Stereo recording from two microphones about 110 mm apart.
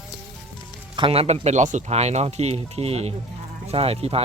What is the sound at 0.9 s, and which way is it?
Speech, 55° right (ahead or behind).